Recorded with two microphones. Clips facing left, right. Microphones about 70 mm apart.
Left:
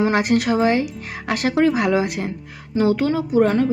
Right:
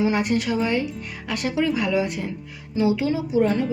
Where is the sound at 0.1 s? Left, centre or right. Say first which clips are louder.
Left 4 dB; left.